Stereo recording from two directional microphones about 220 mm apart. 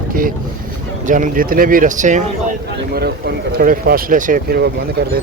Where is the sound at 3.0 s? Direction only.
45° right (ahead or behind).